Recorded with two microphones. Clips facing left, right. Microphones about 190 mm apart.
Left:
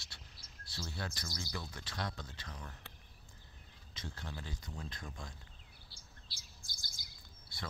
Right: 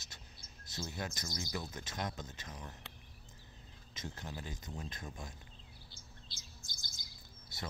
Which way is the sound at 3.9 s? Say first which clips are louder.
Right 2 dB; 15° right (ahead or behind).